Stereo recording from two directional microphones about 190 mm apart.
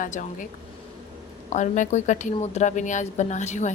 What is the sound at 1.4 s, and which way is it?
A woman's voice, 40° left (ahead or behind).